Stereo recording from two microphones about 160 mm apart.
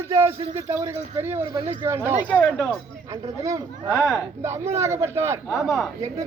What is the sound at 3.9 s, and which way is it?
Speech, centre (ahead or behind).